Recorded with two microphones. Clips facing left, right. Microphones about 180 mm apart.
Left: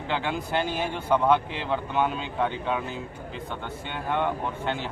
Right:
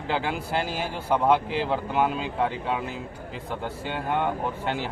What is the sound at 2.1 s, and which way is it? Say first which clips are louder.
Speech: right 1 dB; 5° right (ahead or behind).